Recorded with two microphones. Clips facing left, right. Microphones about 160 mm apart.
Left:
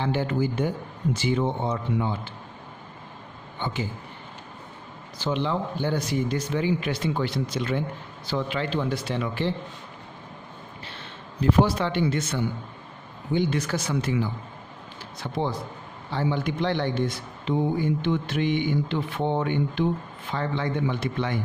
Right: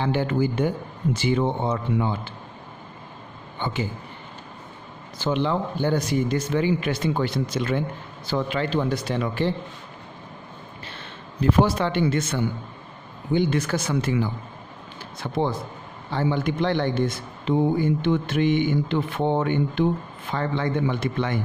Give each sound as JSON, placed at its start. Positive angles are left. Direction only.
{"t": 0.0, "sound": "speech", "side_deg": -65}
{"t": 5.2, "sound": "speech", "side_deg": -55}
{"t": 11.6, "sound": "speech", "side_deg": -50}
{"t": 15.2, "sound": "a man's voice", "side_deg": -65}
{"t": 16.1, "sound": "speech", "side_deg": -50}